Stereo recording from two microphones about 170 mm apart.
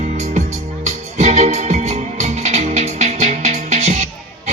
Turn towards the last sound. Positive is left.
turn(degrees=-40)  # may be behind; listen again after turning